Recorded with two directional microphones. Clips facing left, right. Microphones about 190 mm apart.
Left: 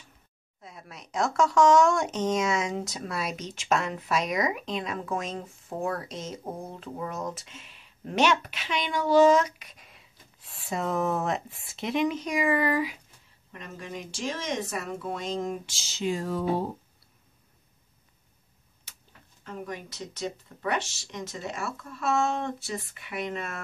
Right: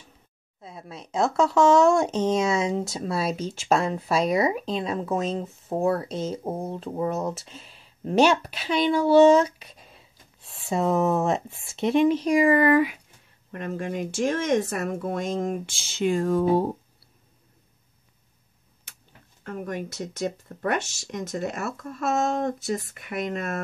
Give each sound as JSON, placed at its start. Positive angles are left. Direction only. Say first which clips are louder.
{"t": 0.6, "sound": "speech", "louder": "right 6 dB", "side_deg": -30}
{"t": 12.4, "sound": "speech", "louder": "right 6 dB", "side_deg": -50}
{"t": 19.4, "sound": "speech", "louder": "right 6 dB", "side_deg": -50}